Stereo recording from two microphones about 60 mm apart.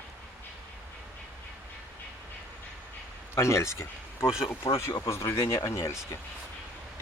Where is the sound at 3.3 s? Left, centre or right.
Left.